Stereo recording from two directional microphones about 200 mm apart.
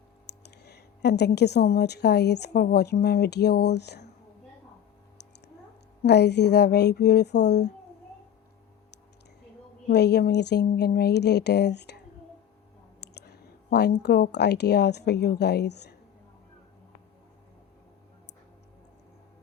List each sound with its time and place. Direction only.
0.3 s a woman's voice: 55° left (ahead or behind)
6.0 s speech: 55° left (ahead or behind)
9.9 s speech: 55° left (ahead or behind)
13.0 s speech: 55° left (ahead or behind)